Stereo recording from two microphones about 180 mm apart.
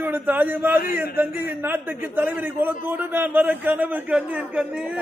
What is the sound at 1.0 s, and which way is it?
A man's voice, 10° right (ahead or behind).